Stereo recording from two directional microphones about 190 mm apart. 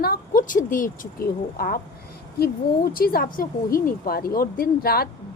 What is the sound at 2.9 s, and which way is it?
A woman's voice, 50° left (ahead or behind).